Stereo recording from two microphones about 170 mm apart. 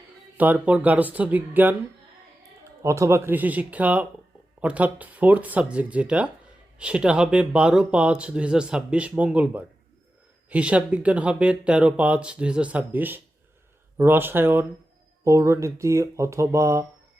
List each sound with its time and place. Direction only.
0.3 s speech: 10° right (ahead or behind)